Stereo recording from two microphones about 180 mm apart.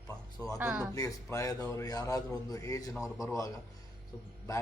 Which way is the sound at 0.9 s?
20° left (ahead or behind).